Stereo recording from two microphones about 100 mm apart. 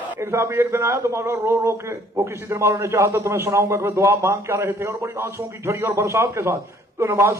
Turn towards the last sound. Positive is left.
turn(degrees=-25)  # may be behind; listen again after turning